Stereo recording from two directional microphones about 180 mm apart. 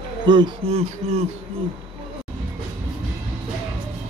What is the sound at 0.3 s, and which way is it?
Speech, 30° right (ahead or behind).